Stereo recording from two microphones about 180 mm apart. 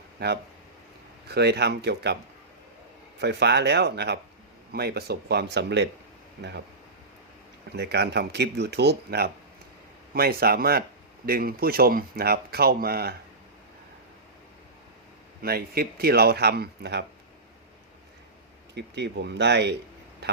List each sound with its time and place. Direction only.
0.2 s speech: 60° right (ahead or behind)
3.2 s speech: 70° right (ahead or behind)
7.8 s speech: 70° right (ahead or behind)
15.4 s speech: 60° right (ahead or behind)
18.7 s speech: 70° right (ahead or behind)